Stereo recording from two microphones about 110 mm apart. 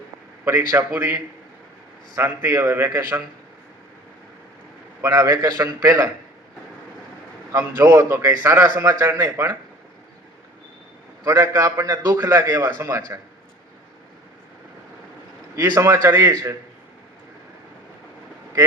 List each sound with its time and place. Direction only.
0.4 s a man's voice: 30° right (ahead or behind)
5.0 s a man's voice: 35° right (ahead or behind)
7.9 s a man's voice: 25° right (ahead or behind)
11.2 s a man's voice: 30° right (ahead or behind)
15.5 s a man's voice: 30° right (ahead or behind)